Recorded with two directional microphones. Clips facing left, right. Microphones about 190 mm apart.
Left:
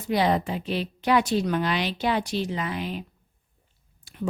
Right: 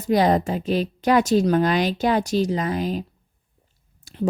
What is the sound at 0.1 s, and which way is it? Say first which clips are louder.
A woman's voice: right 5 dB; 45° right (ahead or behind).